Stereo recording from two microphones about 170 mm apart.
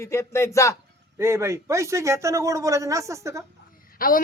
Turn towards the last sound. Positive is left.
turn(degrees=55)  # may be behind; listen again after turning